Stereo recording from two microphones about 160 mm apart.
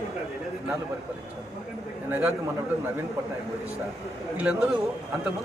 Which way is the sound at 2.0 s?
15° right (ahead or behind).